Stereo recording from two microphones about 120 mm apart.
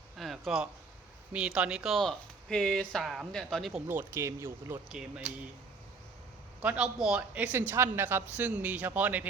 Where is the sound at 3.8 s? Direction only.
20° right (ahead or behind).